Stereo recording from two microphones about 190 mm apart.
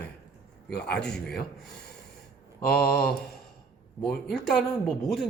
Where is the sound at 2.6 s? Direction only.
55° left (ahead or behind).